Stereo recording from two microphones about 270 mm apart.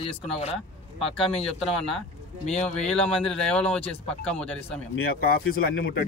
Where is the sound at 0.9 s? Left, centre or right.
Centre.